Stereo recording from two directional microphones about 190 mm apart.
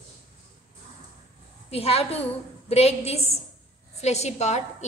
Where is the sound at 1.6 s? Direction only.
30° left (ahead or behind).